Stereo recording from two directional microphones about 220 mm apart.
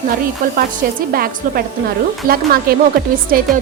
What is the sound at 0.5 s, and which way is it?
A woman's voice, 40° right (ahead or behind).